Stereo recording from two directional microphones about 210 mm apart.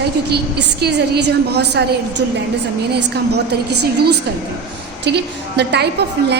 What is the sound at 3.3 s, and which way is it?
A woman's voice, 50° right (ahead or behind).